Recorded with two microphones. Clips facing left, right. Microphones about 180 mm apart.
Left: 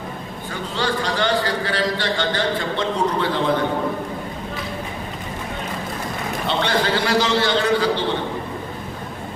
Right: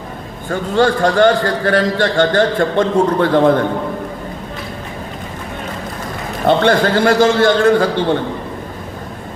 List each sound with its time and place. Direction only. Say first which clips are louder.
0.5 s a man's voice: right 10 dB; 50° right (ahead or behind)
6.4 s a man's voice: right 9 dB; 50° right (ahead or behind)